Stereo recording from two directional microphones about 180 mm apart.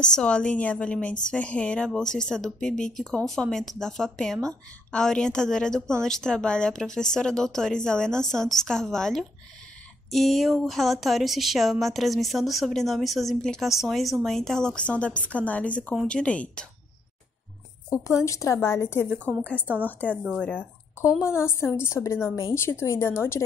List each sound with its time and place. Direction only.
0.0 s a woman's voice: 5° left (ahead or behind)
17.8 s a woman's voice: 20° left (ahead or behind)